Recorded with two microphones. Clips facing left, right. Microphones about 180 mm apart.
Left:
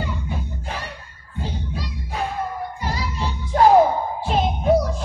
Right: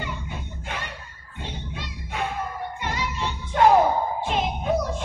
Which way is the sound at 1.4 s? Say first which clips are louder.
Left 5 dB; 35° left (ahead or behind).